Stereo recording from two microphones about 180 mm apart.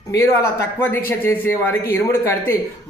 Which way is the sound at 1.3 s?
15° left (ahead or behind).